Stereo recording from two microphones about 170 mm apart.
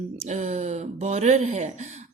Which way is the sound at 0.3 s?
45° right (ahead or behind).